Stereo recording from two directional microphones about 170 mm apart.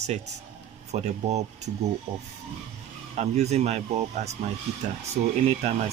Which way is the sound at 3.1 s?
40° right (ahead or behind).